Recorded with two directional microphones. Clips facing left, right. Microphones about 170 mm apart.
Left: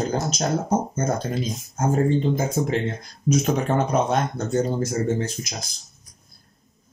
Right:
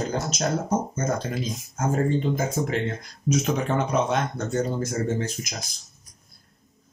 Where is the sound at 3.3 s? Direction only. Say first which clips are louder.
Left 3 dB; 40° left (ahead or behind).